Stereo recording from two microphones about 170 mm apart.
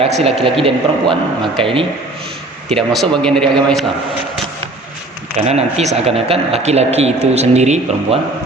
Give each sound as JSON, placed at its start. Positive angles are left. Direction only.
{"t": 0.0, "sound": "speech", "side_deg": -35}
{"t": 2.6, "sound": "a man's voice", "side_deg": 0}
{"t": 5.5, "sound": "speech", "side_deg": -40}